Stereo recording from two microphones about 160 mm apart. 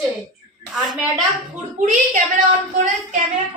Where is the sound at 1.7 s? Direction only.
55° right (ahead or behind).